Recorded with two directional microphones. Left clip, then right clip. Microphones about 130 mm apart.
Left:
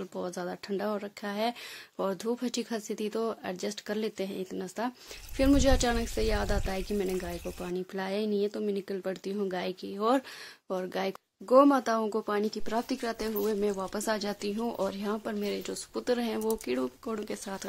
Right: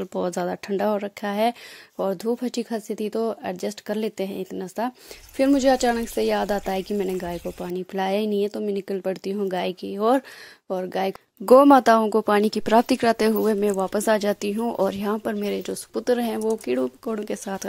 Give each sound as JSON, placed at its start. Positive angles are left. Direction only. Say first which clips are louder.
{"t": 0.0, "sound": "speech", "louder": "right 10 dB", "side_deg": -45}
{"t": 11.4, "sound": "speech", "louder": "right 9 dB", "side_deg": -75}
{"t": 13.4, "sound": "speech", "louder": "right 8 dB", "side_deg": -45}
{"t": 14.6, "sound": "speech", "louder": "right 7 dB", "side_deg": -35}
{"t": 14.9, "sound": "speech", "louder": "right 8 dB", "side_deg": -45}